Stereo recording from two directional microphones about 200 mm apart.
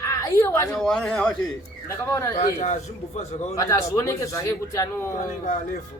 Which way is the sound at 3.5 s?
15° left (ahead or behind).